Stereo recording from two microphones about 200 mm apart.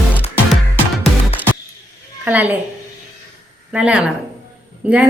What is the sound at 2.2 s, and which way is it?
Speech, 10° right (ahead or behind).